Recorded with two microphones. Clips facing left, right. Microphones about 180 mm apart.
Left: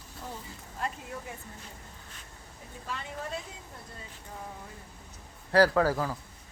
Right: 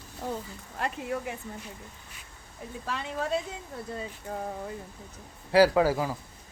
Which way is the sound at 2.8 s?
90° right.